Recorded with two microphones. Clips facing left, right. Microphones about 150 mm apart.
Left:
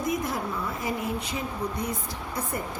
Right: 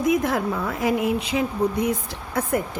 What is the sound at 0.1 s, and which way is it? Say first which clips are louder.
A woman's voice: right 9 dB; 90° right.